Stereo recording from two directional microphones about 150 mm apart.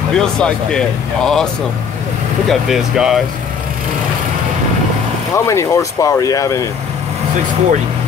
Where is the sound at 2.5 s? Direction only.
5° right (ahead or behind).